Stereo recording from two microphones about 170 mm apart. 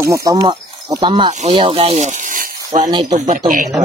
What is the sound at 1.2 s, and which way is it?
Speech, 40° right (ahead or behind).